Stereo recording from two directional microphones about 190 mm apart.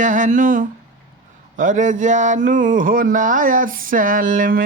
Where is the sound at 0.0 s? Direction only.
45° right (ahead or behind).